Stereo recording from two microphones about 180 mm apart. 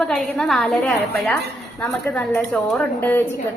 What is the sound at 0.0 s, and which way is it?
A woman's voice, centre (ahead or behind).